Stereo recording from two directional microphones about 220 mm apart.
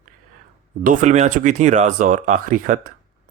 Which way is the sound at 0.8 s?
35° right (ahead or behind).